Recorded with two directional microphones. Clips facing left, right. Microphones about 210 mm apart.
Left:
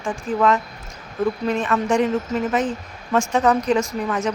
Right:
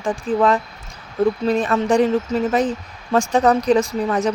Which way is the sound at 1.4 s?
35° right (ahead or behind).